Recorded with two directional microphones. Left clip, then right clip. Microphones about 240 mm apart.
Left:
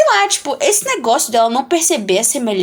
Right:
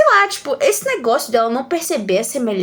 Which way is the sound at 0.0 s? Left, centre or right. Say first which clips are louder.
Even; centre.